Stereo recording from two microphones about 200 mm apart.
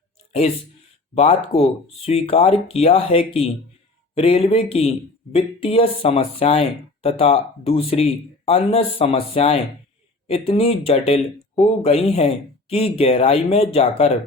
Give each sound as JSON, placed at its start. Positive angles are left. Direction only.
{"t": 1.1, "sound": "speech", "side_deg": 30}